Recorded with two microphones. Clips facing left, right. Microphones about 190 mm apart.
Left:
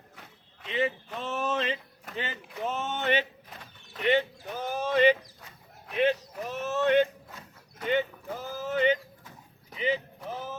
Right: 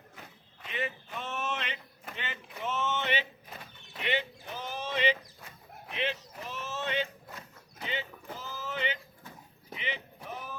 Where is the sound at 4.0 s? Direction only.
45° left (ahead or behind).